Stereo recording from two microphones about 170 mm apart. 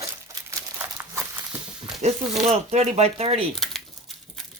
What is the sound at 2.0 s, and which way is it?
Speech, 40° right (ahead or behind).